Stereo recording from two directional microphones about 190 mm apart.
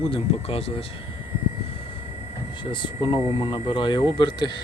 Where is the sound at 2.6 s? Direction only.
25° left (ahead or behind).